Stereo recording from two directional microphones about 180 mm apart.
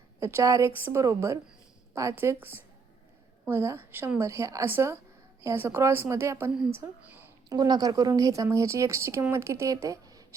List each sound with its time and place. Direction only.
0.2 s a woman's voice: 15° right (ahead or behind)